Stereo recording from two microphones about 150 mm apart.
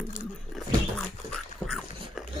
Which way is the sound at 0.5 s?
5° left (ahead or behind).